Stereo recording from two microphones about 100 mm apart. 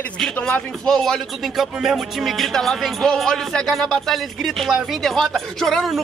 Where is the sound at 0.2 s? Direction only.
5° left (ahead or behind).